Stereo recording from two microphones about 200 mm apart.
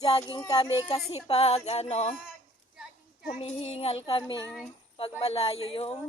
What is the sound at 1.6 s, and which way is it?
Speech, 30° left (ahead or behind).